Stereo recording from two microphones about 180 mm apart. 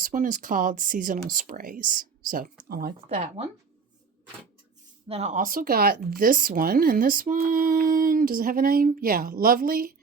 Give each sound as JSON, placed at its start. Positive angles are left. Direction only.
{"t": 0.0, "sound": "speech", "side_deg": -50}
{"t": 5.0, "sound": "speech", "side_deg": -35}